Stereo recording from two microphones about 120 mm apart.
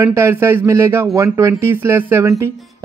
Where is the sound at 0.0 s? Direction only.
20° right (ahead or behind).